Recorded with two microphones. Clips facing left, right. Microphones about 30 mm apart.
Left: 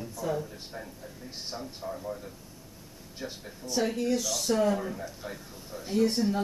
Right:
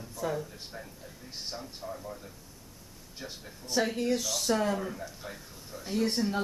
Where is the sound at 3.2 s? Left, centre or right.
Centre.